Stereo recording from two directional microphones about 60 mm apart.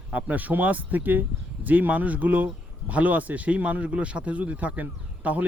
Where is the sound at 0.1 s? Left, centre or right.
Right.